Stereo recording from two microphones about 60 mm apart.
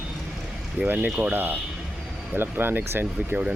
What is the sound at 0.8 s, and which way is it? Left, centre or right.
Speech, right.